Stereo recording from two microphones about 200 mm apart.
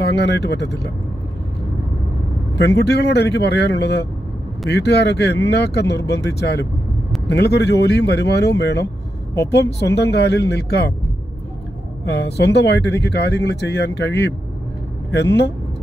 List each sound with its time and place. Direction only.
0.0 s speech: 60° left (ahead or behind)
2.5 s speech: 60° left (ahead or behind)
12.0 s speech: 55° left (ahead or behind)